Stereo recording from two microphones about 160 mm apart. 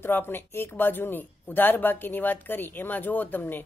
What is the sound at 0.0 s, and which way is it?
Speech, 15° left (ahead or behind).